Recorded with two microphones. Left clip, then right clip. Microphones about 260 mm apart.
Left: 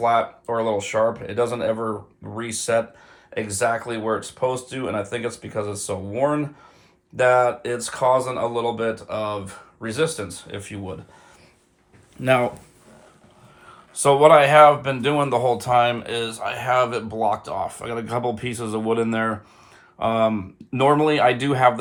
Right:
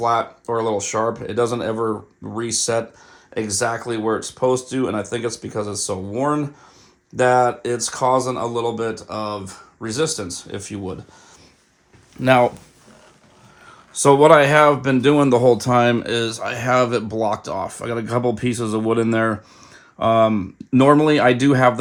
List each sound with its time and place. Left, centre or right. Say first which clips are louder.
0.0 s speech: even; centre
12.1 s speech: right 4 dB; right
14.0 s speech: right 2 dB; right